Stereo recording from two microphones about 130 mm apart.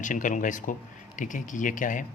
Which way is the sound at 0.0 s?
80° left.